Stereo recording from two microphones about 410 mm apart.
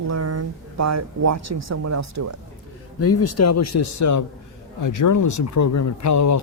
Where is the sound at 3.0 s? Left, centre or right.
Left.